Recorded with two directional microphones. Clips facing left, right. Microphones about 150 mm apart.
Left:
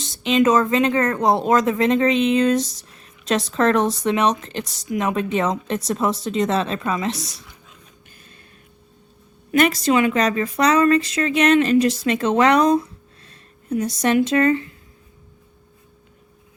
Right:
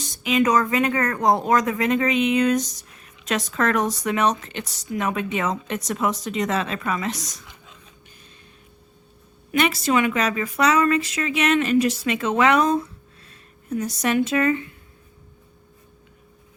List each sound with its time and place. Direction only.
0.3 s speech: 25° left (ahead or behind)
9.5 s a woman's voice: 40° left (ahead or behind)